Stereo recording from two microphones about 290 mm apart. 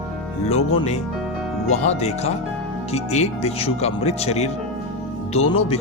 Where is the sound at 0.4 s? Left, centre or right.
Left.